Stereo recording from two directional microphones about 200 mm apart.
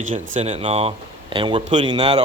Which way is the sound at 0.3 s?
30° right (ahead or behind).